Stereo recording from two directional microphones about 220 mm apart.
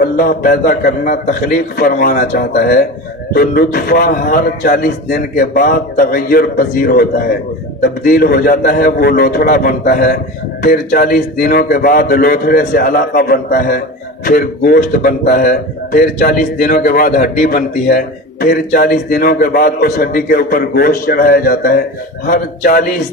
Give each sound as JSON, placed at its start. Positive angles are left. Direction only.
{"t": 0.0, "sound": "a man's voice", "side_deg": 40}